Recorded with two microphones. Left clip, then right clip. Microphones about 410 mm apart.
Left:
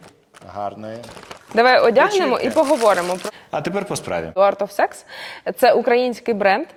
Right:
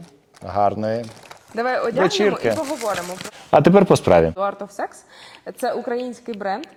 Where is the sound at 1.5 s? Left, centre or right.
Left.